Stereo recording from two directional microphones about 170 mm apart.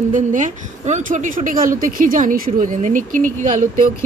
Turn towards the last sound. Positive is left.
turn(degrees=-45)  # may be behind; listen again after turning